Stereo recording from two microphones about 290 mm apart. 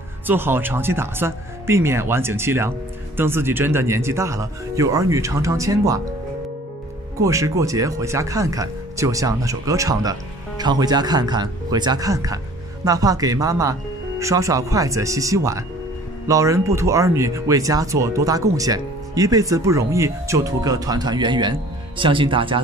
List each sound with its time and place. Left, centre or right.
0.3 s speech: centre
7.2 s speech: centre